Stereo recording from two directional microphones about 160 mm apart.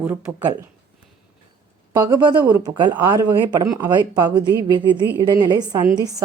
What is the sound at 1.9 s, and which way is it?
Speech, 25° right (ahead or behind).